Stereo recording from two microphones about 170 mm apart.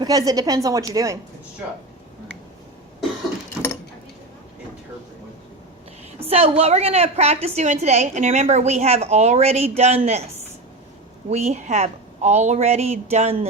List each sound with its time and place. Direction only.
0.0 s a woman's voice: 20° right (ahead or behind)
6.1 s a woman's voice: 35° right (ahead or behind)
11.3 s a woman's voice: 40° right (ahead or behind)